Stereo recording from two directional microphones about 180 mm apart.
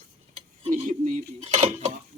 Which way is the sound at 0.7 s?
50° right (ahead or behind).